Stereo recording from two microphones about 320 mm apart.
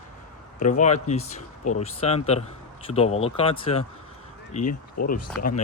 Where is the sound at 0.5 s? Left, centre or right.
Left.